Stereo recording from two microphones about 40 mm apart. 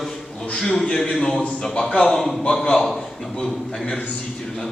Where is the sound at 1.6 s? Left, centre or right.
Left.